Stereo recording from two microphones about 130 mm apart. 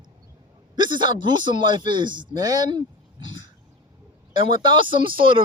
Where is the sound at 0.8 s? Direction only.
35° right (ahead or behind).